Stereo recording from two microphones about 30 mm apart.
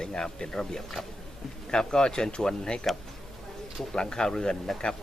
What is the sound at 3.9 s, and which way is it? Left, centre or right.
Speech, left.